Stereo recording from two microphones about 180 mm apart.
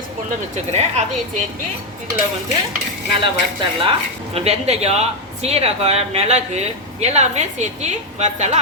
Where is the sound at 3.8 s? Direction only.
30° right (ahead or behind).